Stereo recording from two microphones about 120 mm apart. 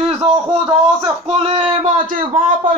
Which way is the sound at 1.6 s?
85° right.